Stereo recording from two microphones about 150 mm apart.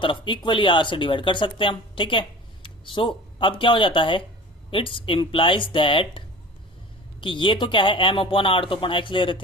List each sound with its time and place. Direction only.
0.0 s speech: 35° left (ahead or behind)